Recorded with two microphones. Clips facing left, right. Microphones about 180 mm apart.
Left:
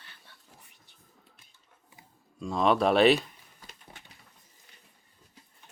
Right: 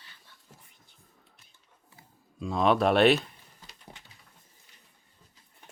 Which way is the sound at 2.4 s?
Centre (ahead or behind).